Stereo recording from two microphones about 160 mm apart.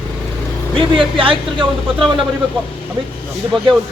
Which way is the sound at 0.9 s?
35° right (ahead or behind).